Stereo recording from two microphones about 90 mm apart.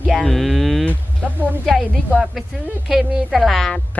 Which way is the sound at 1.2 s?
20° right (ahead or behind).